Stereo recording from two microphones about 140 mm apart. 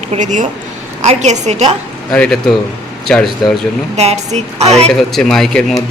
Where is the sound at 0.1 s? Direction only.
60° right (ahead or behind).